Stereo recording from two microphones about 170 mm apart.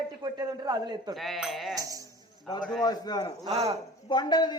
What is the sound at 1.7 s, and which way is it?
Speech, 20° right (ahead or behind).